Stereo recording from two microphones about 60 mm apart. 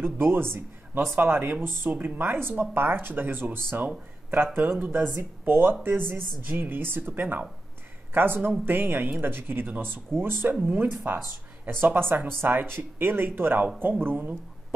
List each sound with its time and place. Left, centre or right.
0.0 s speech: right